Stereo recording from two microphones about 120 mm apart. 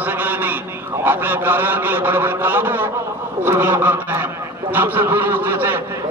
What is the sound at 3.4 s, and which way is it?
Honk, 20° right (ahead or behind).